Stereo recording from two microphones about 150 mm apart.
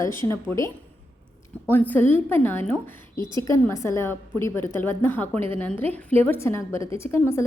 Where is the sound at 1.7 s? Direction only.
10° left (ahead or behind).